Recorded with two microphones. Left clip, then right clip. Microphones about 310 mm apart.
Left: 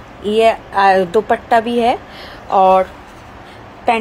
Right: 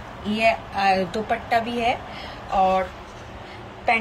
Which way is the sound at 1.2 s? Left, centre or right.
Left.